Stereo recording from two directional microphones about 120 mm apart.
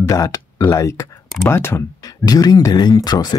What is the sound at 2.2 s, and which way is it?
Speech, 35° left (ahead or behind).